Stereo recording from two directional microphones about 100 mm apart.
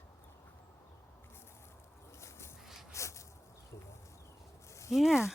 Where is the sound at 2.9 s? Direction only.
30° left (ahead or behind).